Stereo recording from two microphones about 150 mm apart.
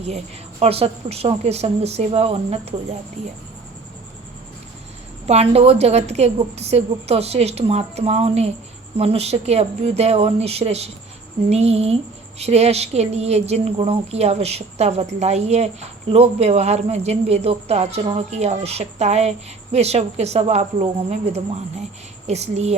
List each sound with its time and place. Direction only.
0.6 s a woman's voice: 40° right (ahead or behind)
5.3 s a woman's voice: 45° right (ahead or behind)